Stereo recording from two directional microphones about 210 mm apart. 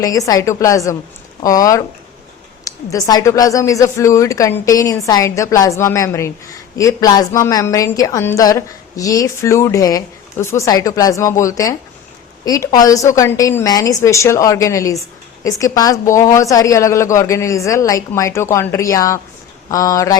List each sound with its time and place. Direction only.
0.0 s a woman's voice: 15° left (ahead or behind)